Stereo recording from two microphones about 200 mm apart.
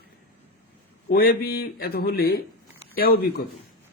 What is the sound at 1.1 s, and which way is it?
Speech, 50° left (ahead or behind).